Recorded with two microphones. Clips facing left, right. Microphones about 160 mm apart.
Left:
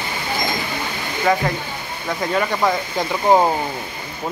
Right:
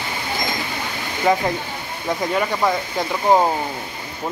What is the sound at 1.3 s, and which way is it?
Speech, 20° right (ahead or behind).